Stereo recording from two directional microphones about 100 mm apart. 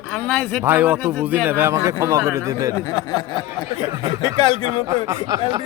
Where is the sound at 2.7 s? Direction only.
50° left (ahead or behind).